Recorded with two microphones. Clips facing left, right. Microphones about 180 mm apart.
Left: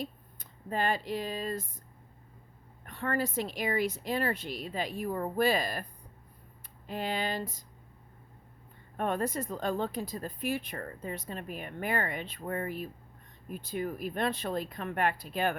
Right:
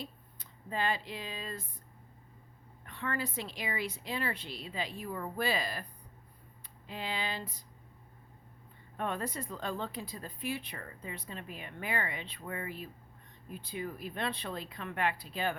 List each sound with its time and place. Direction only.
0.0 s speech: 50° left (ahead or behind)
2.8 s speech: 45° left (ahead or behind)
6.8 s speech: 50° left (ahead or behind)
9.0 s speech: 45° left (ahead or behind)